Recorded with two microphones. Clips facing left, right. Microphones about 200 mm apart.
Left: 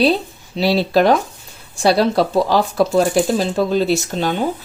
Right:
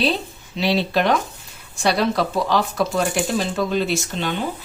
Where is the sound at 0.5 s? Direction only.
40° left (ahead or behind).